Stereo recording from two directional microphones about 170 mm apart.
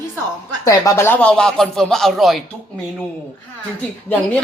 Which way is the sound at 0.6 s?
20° left (ahead or behind).